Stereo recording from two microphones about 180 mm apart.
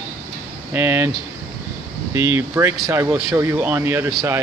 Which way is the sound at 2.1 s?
15° right (ahead or behind).